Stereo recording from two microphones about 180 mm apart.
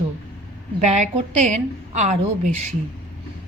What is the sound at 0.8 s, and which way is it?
A woman's voice, 40° right (ahead or behind).